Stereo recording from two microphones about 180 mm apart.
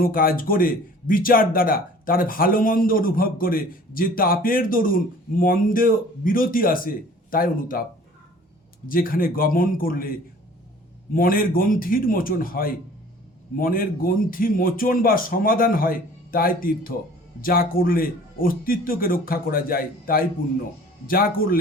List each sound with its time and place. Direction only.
0.0 s speech: 55° left (ahead or behind)
8.9 s speech: 50° left (ahead or behind)